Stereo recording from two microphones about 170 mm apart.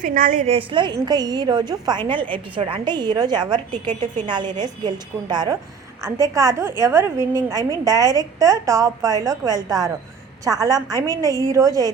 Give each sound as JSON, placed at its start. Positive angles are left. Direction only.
{"t": 0.0, "sound": "a woman's voice", "side_deg": -55}